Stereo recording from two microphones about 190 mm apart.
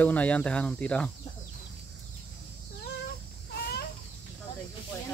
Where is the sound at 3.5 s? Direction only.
55° left (ahead or behind).